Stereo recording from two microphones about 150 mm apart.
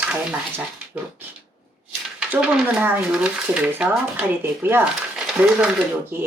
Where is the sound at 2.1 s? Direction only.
10° right (ahead or behind).